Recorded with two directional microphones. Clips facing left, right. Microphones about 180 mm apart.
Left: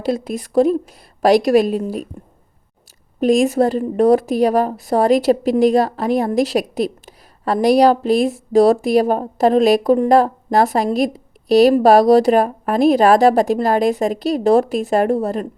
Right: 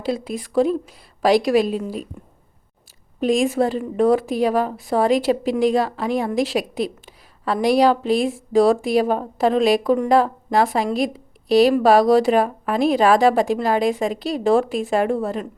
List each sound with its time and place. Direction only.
0.0 s a woman's voice: 45° left (ahead or behind)
3.2 s a woman's voice: 45° left (ahead or behind)